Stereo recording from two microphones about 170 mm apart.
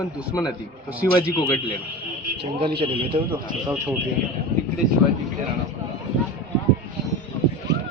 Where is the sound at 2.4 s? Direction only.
30° right (ahead or behind).